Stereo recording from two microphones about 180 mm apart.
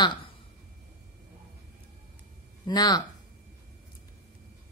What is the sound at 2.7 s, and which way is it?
Speech, 20° left (ahead or behind).